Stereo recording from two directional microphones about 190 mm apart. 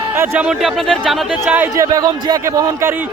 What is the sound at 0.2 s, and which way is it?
Speech, 5° right (ahead or behind).